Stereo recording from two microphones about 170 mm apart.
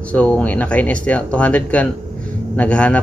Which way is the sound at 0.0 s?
5° left (ahead or behind).